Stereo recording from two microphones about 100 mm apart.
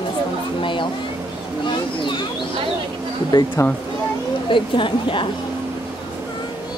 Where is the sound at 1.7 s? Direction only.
50° left (ahead or behind).